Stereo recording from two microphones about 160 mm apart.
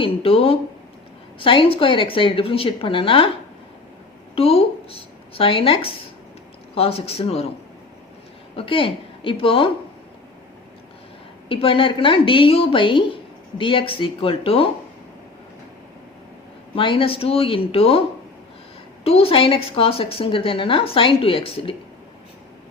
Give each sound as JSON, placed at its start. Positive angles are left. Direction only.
{"t": 0.0, "sound": "a woman's voice", "side_deg": 35}
{"t": 4.4, "sound": "a woman's voice", "side_deg": 35}
{"t": 8.5, "sound": "speech", "side_deg": 35}
{"t": 11.4, "sound": "a woman's voice", "side_deg": 35}
{"t": 16.7, "sound": "a woman's voice", "side_deg": 35}
{"t": 19.0, "sound": "a woman's voice", "side_deg": 40}